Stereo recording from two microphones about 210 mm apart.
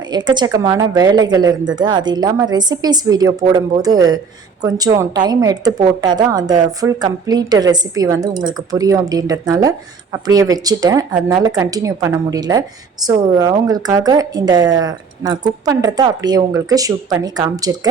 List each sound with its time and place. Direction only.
0.1 s a woman's voice: 20° right (ahead or behind)